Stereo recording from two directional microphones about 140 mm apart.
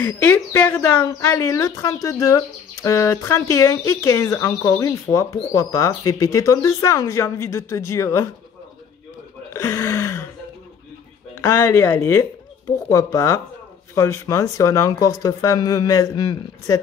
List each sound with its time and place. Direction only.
0.0 s speech: 15° left (ahead or behind)
9.5 s speech: 20° left (ahead or behind)
11.3 s speech: 15° left (ahead or behind)